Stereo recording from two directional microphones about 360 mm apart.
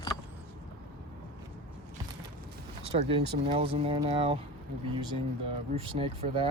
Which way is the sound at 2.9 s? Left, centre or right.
Centre.